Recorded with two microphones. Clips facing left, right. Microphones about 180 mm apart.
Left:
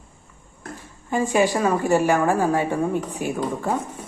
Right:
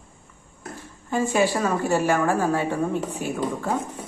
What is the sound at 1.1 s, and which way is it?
Speech, 15° left (ahead or behind).